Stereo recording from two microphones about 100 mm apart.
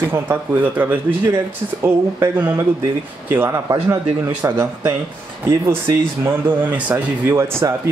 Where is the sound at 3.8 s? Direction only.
25° right (ahead or behind).